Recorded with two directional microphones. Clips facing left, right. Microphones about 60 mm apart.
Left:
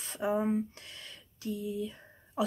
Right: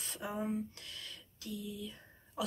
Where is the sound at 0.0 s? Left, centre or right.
Left.